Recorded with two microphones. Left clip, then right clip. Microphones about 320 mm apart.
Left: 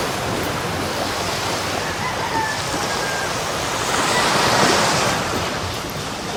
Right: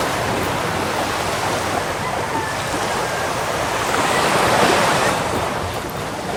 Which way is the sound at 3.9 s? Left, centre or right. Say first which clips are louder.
Even; right.